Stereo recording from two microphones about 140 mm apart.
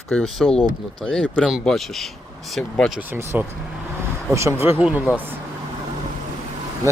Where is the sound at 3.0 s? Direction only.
15° right (ahead or behind).